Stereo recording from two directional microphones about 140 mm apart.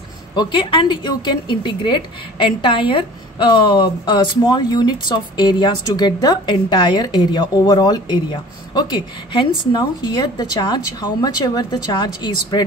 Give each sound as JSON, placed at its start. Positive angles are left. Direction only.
{"t": 0.4, "sound": "a woman's voice", "side_deg": 35}